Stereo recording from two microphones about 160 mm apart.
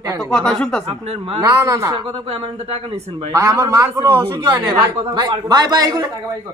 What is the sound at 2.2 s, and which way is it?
Speech, 40° right (ahead or behind).